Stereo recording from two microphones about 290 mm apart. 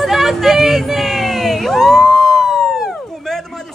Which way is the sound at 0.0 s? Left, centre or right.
Centre.